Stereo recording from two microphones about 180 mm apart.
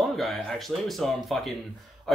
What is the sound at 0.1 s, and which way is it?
Speech, centre (ahead or behind).